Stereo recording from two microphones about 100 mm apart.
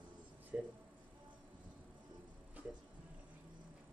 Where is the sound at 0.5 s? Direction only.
15° right (ahead or behind).